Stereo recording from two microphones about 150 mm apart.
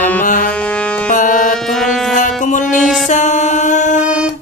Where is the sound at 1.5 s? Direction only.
Centre (ahead or behind).